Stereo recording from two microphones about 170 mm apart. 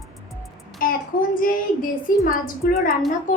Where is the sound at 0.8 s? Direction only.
55° left (ahead or behind).